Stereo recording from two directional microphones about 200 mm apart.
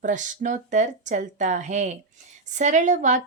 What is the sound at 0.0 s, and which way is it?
Speech, 40° right (ahead or behind).